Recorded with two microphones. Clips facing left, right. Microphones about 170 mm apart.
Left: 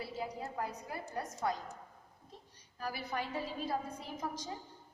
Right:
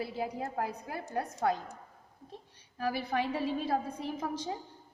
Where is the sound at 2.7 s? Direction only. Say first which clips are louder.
Right 7 dB; 65° right (ahead or behind).